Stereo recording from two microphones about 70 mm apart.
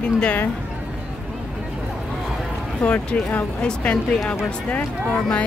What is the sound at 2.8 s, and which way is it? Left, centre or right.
Speech, centre.